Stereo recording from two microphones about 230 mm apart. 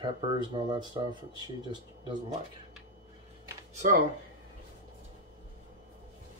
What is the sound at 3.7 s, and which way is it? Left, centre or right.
Speech, right.